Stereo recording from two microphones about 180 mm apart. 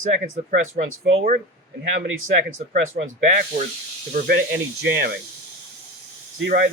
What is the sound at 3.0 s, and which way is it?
Speech, 45° right (ahead or behind).